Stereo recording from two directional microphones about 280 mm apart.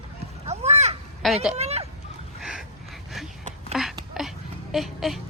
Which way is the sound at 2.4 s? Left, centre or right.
Centre.